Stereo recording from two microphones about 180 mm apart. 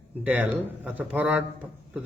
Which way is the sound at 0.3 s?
10° right (ahead or behind).